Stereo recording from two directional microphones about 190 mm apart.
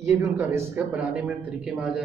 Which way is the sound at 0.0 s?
15° right (ahead or behind).